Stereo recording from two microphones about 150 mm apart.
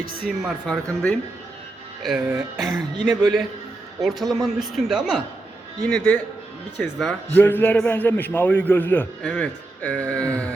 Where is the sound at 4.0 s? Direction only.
Centre (ahead or behind).